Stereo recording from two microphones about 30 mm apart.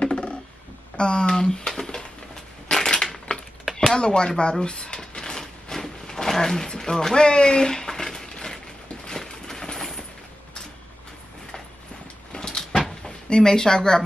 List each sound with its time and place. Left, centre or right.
0.0 s a sound: left
0.9 s speech: left
2.7 s crushing: centre
3.7 s speech: left
5.2 s a sound: centre
6.8 s speech: centre
7.2 s a sound: left; by 10.0 s centre
12.3 s vehicle: left
13.0 s speech: left